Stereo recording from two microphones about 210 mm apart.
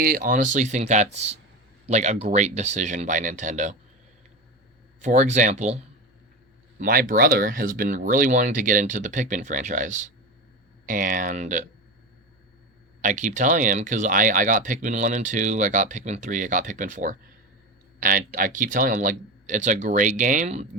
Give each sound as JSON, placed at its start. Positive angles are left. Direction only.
{"t": 0.0, "sound": "speech", "side_deg": -40}
{"t": 4.9, "sound": "speech", "side_deg": -35}
{"t": 13.0, "sound": "speech", "side_deg": -35}